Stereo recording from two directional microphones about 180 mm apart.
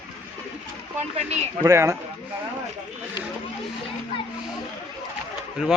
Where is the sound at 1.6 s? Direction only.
15° right (ahead or behind).